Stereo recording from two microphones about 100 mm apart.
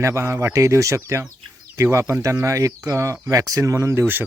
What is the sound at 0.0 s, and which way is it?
Speech, 30° right (ahead or behind).